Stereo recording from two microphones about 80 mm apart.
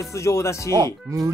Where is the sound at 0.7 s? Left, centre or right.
Right.